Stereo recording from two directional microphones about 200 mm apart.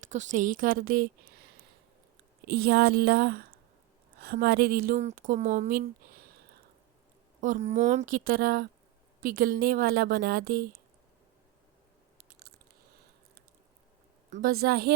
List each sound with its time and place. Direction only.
0.0 s speech: 40° right (ahead or behind)
7.4 s speech: 40° right (ahead or behind)
14.3 s speech: 40° right (ahead or behind)